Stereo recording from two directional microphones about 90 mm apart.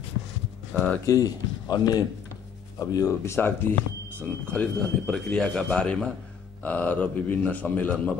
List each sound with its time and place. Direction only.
1.0 s speech: 40° left (ahead or behind)
3.1 s speech: 25° left (ahead or behind)
4.2 s a man's voice: 15° left (ahead or behind)